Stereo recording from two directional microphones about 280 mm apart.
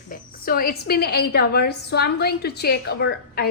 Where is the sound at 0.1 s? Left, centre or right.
Left.